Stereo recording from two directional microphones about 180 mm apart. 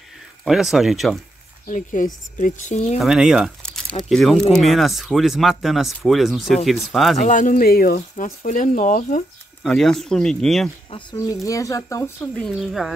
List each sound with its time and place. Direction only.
0.5 s speech: centre (ahead or behind)
1.7 s speech: 45° left (ahead or behind)
3.0 s speech: 5° right (ahead or behind)
7.2 s speech: 45° left (ahead or behind)
9.6 s speech: 5° left (ahead or behind)
11.1 s speech: 20° left (ahead or behind)
12.4 s speech: centre (ahead or behind)